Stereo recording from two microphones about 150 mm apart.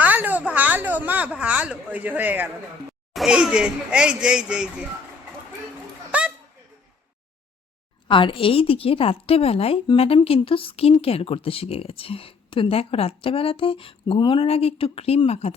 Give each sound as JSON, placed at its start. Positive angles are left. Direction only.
{"t": 0.0, "sound": "a sound", "side_deg": -10}
{"t": 3.1, "sound": "speech", "side_deg": -5}
{"t": 6.1, "sound": "children playing", "side_deg": -10}
{"t": 8.0, "sound": "a woman's voice", "side_deg": 35}